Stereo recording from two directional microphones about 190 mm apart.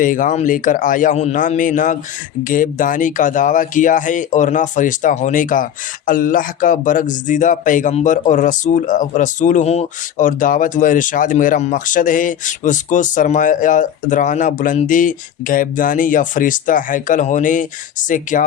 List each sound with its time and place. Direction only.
0.0 s speech: 45° left (ahead or behind)